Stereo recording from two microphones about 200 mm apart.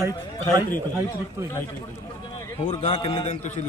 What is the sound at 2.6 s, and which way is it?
Speech, 35° left (ahead or behind).